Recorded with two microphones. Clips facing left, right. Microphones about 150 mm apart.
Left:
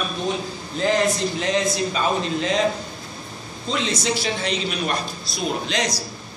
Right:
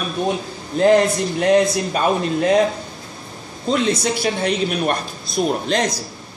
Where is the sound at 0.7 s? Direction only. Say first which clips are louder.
Right 7 dB; 55° right (ahead or behind).